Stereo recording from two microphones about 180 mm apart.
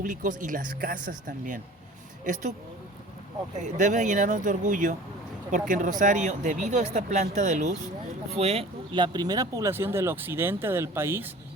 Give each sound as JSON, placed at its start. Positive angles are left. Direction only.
{"t": 0.0, "sound": "speech", "side_deg": -45}
{"t": 3.5, "sound": "speech", "side_deg": -45}